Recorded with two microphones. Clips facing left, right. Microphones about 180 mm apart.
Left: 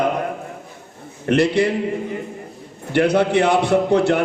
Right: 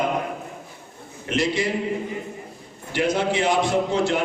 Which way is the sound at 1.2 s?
60° left (ahead or behind).